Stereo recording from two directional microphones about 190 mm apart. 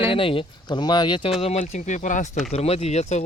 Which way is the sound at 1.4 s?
35° left (ahead or behind).